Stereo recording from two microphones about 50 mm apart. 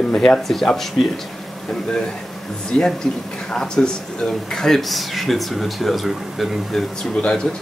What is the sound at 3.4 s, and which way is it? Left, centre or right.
A woman's voice, centre.